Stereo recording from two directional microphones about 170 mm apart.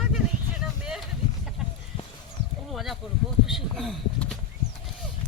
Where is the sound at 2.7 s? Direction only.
Centre (ahead or behind).